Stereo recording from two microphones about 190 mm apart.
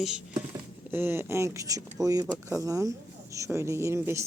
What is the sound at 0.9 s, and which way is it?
Speech, 10° right (ahead or behind).